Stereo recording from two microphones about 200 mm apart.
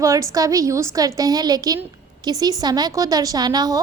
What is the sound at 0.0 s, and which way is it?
A woman's voice, 15° right (ahead or behind).